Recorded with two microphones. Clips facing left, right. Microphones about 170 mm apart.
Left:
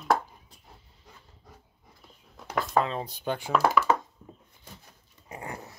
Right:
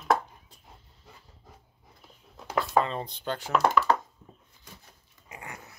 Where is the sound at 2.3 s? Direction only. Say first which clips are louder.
Right 1 dB; centre (ahead or behind).